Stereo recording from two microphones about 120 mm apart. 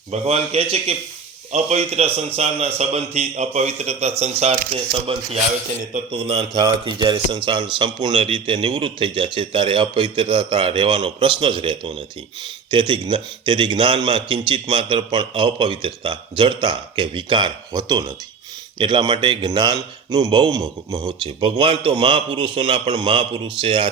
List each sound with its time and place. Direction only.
0.1 s a man's voice: 60° right (ahead or behind)
4.7 s a man's voice: 45° right (ahead or behind)
6.1 s a man's voice: 55° right (ahead or behind)
6.8 s a man's voice: 35° right (ahead or behind)
21.2 s a man's voice: 45° right (ahead or behind)